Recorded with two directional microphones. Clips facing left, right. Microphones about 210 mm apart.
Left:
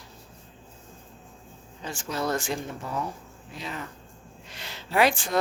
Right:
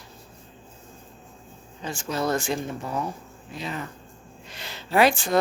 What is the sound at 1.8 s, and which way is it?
Speech, 25° right (ahead or behind).